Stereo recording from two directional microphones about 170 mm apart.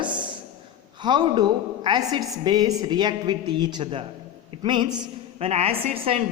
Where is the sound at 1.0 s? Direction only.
25° right (ahead or behind).